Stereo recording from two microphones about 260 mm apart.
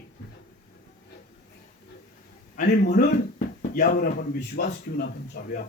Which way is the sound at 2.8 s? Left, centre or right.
Left.